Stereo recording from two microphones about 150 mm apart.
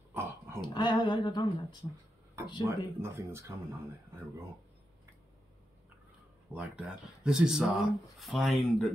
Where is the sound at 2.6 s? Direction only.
20° right (ahead or behind).